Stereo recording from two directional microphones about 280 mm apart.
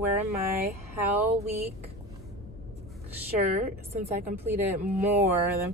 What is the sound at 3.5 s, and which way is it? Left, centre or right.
Speech, right.